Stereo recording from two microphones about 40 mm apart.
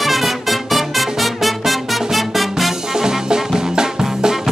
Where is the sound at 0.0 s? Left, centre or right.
Centre.